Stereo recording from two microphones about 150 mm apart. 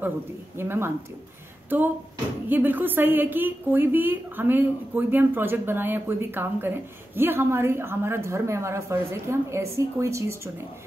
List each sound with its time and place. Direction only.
0.6 s a woman's voice: 15° right (ahead or behind)
2.4 s a woman's voice: 10° right (ahead or behind)